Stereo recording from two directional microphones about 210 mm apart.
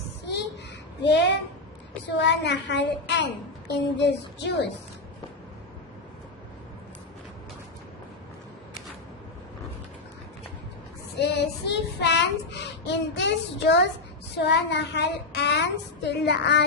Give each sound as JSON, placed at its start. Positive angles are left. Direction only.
{"t": 1.0, "sound": "child singing", "side_deg": 55}
{"t": 11.2, "sound": "child singing", "side_deg": 55}